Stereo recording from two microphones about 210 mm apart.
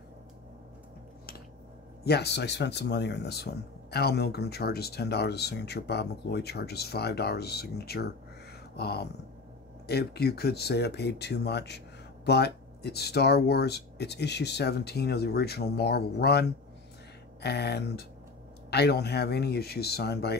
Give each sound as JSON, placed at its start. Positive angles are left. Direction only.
{"t": 2.0, "sound": "speech", "side_deg": 50}